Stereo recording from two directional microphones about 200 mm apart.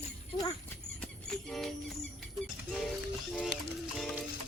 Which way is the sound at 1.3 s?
Centre (ahead or behind).